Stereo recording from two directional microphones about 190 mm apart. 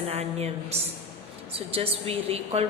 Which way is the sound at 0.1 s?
35° right (ahead or behind).